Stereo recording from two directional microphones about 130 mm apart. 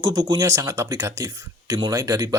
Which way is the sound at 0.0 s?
30° right (ahead or behind).